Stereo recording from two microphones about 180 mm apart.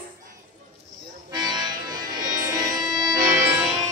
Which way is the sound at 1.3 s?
25° right (ahead or behind).